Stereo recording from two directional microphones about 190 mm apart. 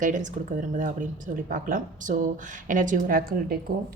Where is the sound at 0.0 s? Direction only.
45° right (ahead or behind).